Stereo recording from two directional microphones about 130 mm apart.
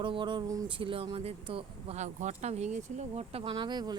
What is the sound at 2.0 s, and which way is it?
Speech, 60° right (ahead or behind).